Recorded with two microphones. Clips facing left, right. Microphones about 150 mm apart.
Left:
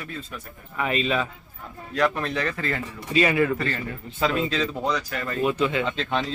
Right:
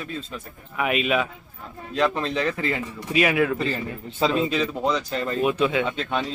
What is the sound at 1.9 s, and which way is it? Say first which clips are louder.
Speech: right 1 dB; 20° right (ahead or behind).